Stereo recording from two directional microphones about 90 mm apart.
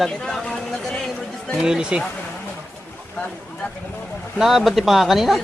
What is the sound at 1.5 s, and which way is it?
Speech, 10° right (ahead or behind).